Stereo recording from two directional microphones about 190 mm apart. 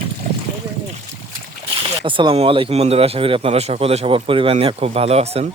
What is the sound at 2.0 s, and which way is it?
Speech, 25° right (ahead or behind).